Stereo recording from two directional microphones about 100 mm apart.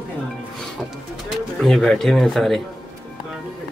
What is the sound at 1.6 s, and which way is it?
Speech, 5° left (ahead or behind).